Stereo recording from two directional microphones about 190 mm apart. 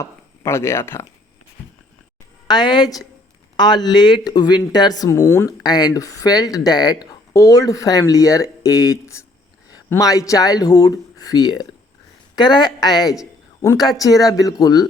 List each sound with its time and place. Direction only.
0.0 s speech: 15° left (ahead or behind)
2.5 s speech: 20° left (ahead or behind)